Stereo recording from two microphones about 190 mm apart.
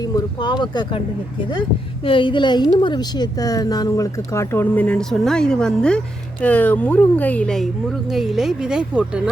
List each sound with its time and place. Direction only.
0.0 s speech: 20° left (ahead or behind)
2.0 s a woman's voice: 25° left (ahead or behind); by 9.3 s 5° right (ahead or behind)